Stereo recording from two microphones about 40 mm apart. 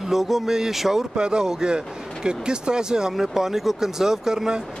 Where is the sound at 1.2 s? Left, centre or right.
Right.